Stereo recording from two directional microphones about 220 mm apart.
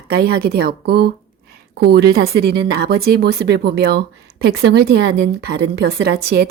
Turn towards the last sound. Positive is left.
turn(degrees=-45)  # may be behind; listen again after turning